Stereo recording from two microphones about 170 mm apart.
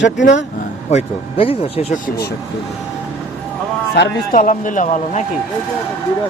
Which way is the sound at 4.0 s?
90° left.